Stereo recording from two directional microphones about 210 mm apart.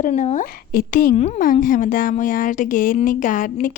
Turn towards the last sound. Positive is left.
turn(degrees=40)  # may be behind; listen again after turning